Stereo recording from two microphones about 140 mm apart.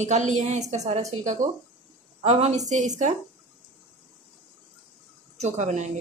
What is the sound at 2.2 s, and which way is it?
Speech, 50° right (ahead or behind).